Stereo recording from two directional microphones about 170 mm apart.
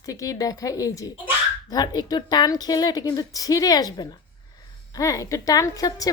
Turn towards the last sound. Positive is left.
turn(degrees=20)  # may be behind; listen again after turning